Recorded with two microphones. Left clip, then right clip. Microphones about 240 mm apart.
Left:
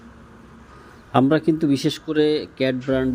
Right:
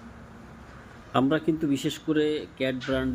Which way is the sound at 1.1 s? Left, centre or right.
Centre.